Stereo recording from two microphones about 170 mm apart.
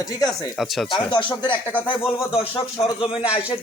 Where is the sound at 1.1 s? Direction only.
30° left (ahead or behind).